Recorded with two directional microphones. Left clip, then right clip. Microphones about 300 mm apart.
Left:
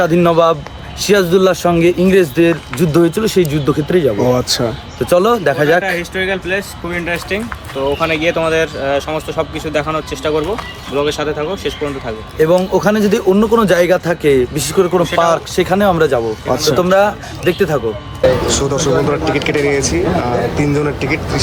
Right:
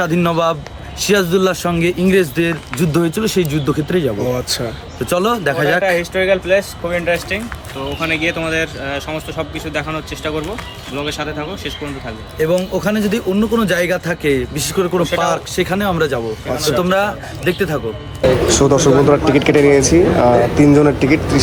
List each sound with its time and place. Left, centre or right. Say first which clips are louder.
0.0 s speech: left 5 dB; centre
4.4 s speech: left 4 dB; centre
5.0 s speech: left 4 dB; centre
5.8 s speech: right 2 dB; right; by 7.4 s centre
7.9 s speech: left 1 dB; centre
12.4 s speech: left 5 dB; centre
16.5 s speech: left 4 dB; centre
16.7 s speech: left 4 dB; centre